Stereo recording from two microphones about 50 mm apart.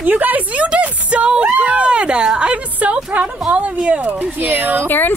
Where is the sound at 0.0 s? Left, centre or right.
Right.